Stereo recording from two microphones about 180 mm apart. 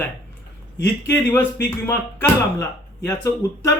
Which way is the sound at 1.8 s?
15° left (ahead or behind).